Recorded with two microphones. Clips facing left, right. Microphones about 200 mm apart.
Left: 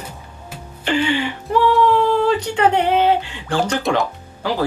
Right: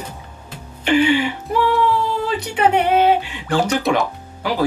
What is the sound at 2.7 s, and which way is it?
Speech, 10° right (ahead or behind).